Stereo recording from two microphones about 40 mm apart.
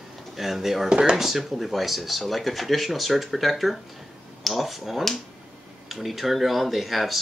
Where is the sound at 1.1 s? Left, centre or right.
Centre.